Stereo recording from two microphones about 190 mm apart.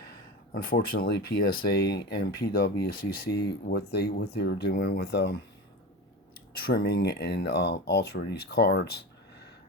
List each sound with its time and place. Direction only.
0.1 s speech: 50° left (ahead or behind)
6.6 s speech: 50° left (ahead or behind)